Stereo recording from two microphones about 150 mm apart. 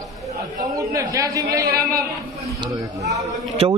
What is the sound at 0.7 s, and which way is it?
Speech, 20° right (ahead or behind).